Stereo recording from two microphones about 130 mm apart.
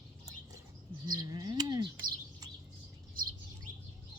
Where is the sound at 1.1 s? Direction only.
30° right (ahead or behind).